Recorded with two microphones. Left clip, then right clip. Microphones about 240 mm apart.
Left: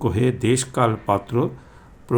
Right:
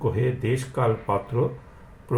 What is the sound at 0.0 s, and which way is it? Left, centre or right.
Speech, left.